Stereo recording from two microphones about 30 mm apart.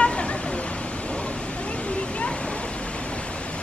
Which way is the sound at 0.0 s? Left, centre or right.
Left.